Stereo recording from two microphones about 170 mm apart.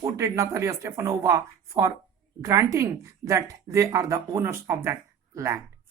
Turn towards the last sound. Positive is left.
turn(degrees=-15)  # may be behind; listen again after turning